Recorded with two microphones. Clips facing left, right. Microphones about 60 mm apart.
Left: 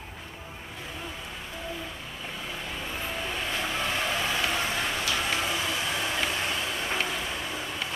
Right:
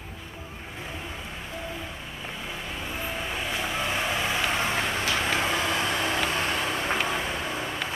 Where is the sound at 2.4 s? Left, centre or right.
Centre; by 7.7 s right.